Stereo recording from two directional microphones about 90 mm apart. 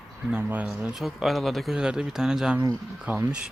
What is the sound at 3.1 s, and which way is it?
Speech, 20° right (ahead or behind).